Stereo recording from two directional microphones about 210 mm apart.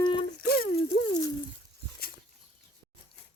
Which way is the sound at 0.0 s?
25° left (ahead or behind).